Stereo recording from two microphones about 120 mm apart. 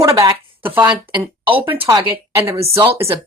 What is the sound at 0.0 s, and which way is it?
Speech, 25° right (ahead or behind).